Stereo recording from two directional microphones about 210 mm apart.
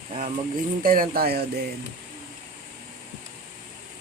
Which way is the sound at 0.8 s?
40° right (ahead or behind).